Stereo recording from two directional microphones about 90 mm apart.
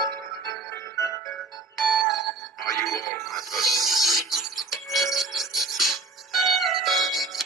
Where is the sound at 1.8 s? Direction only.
Centre (ahead or behind).